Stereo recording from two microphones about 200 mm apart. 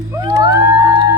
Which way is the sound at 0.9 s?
20° right (ahead or behind).